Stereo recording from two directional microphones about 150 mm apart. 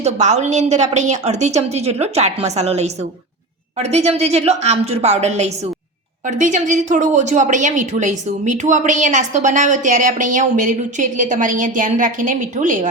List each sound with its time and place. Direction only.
0.0 s a woman's voice: 50° right (ahead or behind)